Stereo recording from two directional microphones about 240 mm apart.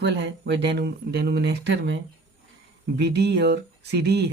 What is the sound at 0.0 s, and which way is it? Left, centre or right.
Speech, right.